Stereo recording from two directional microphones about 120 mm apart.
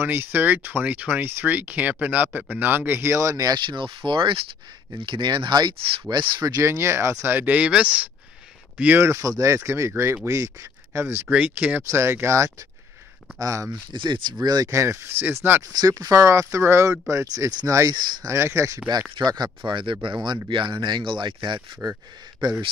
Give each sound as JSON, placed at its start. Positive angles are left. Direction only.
{"t": 0.0, "sound": "speech", "side_deg": -15}
{"t": 13.9, "sound": "speech", "side_deg": -40}
{"t": 15.7, "sound": "speech", "side_deg": -30}
{"t": 19.1, "sound": "speech", "side_deg": -35}